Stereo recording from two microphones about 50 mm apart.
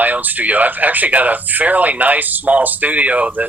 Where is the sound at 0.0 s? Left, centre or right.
Right.